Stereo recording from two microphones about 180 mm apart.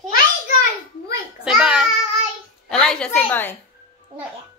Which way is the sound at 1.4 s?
5° right (ahead or behind).